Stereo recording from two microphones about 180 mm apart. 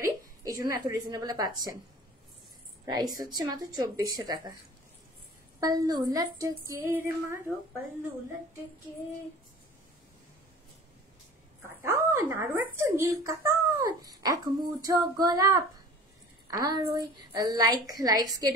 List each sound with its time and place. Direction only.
0.0 s a woman's voice: 20° right (ahead or behind)
2.8 s speech: 20° right (ahead or behind)
5.6 s speech: 20° right (ahead or behind)
11.8 s a woman's voice: 15° right (ahead or behind)